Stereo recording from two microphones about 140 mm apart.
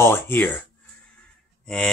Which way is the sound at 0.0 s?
15° left (ahead or behind).